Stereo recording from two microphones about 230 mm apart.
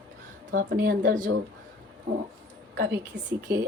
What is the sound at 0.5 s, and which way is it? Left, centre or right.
Speech, right.